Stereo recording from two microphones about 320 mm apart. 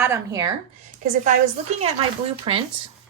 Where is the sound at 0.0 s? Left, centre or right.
Centre.